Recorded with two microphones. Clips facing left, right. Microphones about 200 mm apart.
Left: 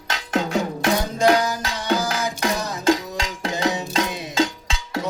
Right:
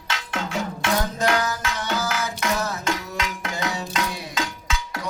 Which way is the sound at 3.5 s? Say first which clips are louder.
Left 8 dB; 20° left (ahead or behind).